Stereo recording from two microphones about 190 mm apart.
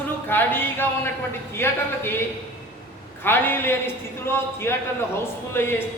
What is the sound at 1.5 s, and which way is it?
Speech, 10° left (ahead or behind).